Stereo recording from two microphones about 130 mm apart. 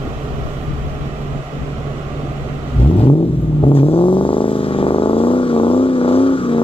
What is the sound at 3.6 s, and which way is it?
Vehicle, 45° left (ahead or behind).